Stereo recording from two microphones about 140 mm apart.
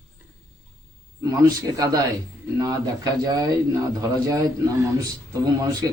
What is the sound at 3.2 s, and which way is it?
Speech, 25° right (ahead or behind).